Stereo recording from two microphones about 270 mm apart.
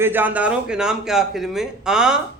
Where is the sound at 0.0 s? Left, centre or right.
Centre.